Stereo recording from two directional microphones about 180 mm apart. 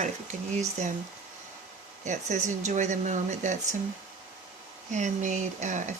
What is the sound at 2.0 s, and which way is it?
Speech, 40° right (ahead or behind).